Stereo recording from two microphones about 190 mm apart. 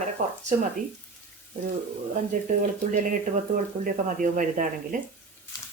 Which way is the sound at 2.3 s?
45° right (ahead or behind).